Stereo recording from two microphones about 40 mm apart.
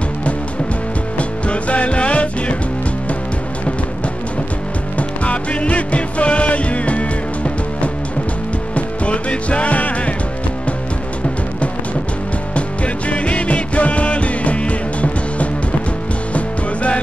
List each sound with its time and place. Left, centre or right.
1.1 s music: left
4.9 s music: left
12.5 s music: left